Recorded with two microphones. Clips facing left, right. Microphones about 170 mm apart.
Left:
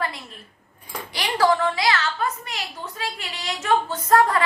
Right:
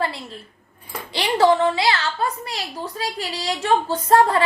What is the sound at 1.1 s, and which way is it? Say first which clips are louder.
A woman's voice: right 4 dB; 25° right (ahead or behind).